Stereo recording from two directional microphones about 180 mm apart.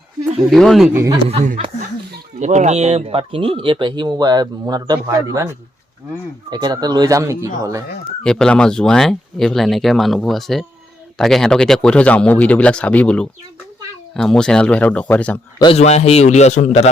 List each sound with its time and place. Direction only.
0.5 s speech: centre (ahead or behind)
1.5 s speech: 35° right (ahead or behind); by 5.5 s 15° right (ahead or behind)
6.5 s speech: 20° right (ahead or behind)
8.2 s speech: 5° left (ahead or behind)
15.5 s a man's voice: 25° left (ahead or behind)
15.8 s a man's voice: 35° left (ahead or behind)